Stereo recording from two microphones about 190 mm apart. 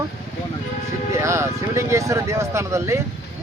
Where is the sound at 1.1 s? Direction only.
15° right (ahead or behind).